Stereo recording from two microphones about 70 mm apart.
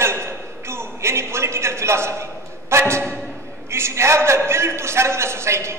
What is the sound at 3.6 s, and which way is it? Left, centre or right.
A man's voice, right.